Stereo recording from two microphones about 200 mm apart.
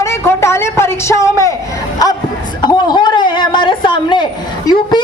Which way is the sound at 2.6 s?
20° left (ahead or behind).